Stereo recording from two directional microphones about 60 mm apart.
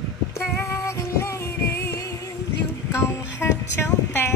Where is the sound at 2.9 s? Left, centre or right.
Left.